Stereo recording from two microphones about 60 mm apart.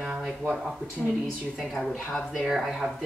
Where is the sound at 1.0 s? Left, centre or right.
Centre.